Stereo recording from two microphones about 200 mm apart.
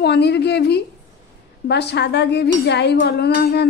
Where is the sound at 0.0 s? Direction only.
55° left (ahead or behind).